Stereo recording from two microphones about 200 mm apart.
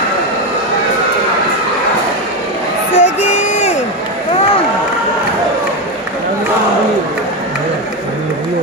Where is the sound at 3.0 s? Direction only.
35° left (ahead or behind).